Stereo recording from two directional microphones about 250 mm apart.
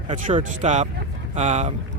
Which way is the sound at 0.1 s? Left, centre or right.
Right.